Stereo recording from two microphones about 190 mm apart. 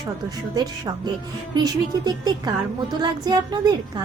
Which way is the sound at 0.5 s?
20° right (ahead or behind).